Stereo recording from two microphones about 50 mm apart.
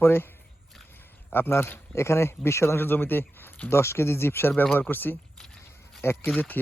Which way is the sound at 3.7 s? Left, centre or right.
Left.